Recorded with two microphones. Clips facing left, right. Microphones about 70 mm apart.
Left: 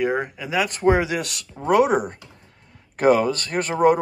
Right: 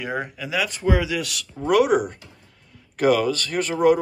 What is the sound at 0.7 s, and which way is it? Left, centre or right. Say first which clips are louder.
Speech: left 5 dB; left.